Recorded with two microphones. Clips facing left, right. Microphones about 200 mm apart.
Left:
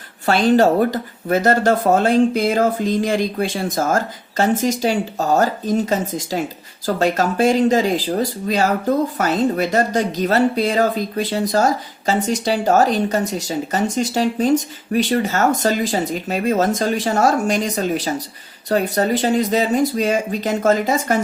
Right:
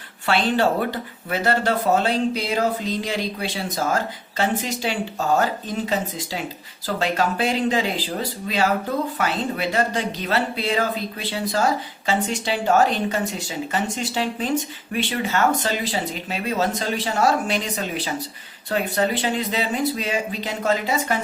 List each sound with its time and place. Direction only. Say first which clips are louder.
0.3 s speech: left 6 dB; 40° left (ahead or behind)